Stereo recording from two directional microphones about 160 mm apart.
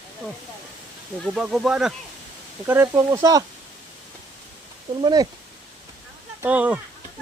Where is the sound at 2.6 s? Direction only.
15° right (ahead or behind).